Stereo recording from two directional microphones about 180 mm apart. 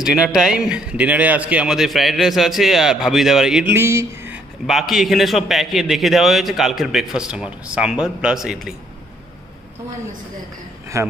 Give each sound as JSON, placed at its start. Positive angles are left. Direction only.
{"t": 0.0, "sound": "a man's voice", "side_deg": -5}
{"t": 3.6, "sound": "a sound", "side_deg": -15}
{"t": 4.6, "sound": "a man's voice", "side_deg": 0}
{"t": 10.9, "sound": "speech", "side_deg": -15}